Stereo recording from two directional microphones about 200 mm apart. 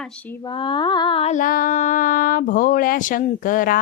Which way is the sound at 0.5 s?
25° left (ahead or behind).